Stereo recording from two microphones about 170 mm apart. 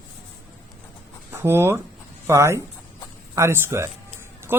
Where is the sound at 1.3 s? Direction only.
15° right (ahead or behind).